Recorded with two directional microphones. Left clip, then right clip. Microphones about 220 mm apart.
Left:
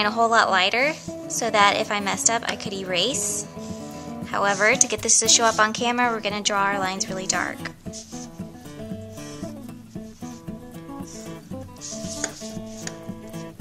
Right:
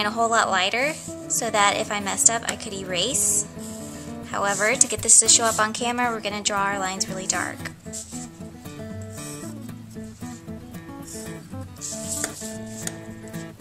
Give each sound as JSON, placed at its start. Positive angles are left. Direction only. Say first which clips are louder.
{"t": 0.0, "sound": "a woman's voice", "louder": "left 2 dB", "side_deg": 5}
{"t": 11.9, "sound": "chopping", "louder": "even", "side_deg": 0}